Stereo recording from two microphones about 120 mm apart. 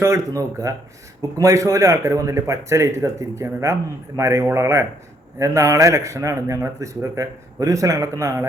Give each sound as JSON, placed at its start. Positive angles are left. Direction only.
{"t": 0.0, "sound": "speech", "side_deg": -25}